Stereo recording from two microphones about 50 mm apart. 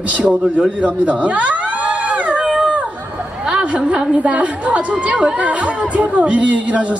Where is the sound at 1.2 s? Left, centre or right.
Right.